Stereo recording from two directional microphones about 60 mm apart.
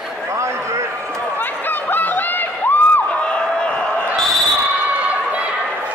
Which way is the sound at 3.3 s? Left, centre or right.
Centre.